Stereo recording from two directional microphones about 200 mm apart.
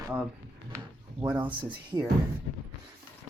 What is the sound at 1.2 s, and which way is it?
Speech, 10° right (ahead or behind).